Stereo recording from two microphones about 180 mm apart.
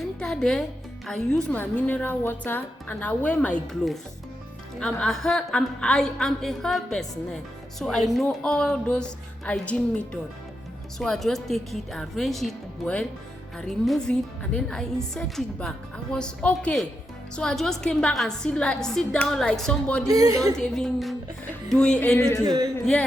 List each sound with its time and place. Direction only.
0.0 s music: centre (ahead or behind)
1.0 s a woman's voice: 5° left (ahead or behind)
20.1 s a woman's voice: 20° right (ahead or behind)
20.6 s a woman's voice: 5° left (ahead or behind)
22.4 s a woman's voice: 25° right (ahead or behind)